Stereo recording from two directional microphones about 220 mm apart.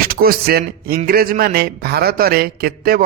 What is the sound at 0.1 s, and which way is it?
A man's voice, 45° right (ahead or behind).